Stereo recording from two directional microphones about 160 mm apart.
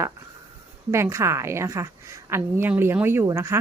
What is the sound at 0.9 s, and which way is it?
A woman's voice, 15° right (ahead or behind).